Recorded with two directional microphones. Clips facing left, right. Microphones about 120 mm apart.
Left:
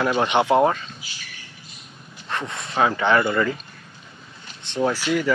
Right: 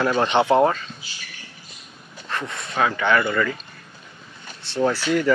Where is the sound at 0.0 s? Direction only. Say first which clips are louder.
Right 1 dB; 10° left (ahead or behind).